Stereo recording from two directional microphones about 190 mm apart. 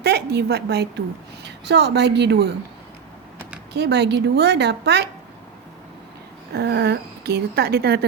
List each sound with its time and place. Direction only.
0.0 s a woman's voice: 60° right (ahead or behind)
3.7 s a woman's voice: 60° right (ahead or behind)
6.5 s a woman's voice: 60° right (ahead or behind)